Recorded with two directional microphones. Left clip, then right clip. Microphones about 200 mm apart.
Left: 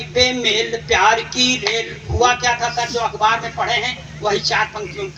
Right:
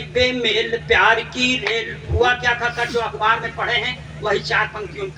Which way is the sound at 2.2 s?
20° left (ahead or behind).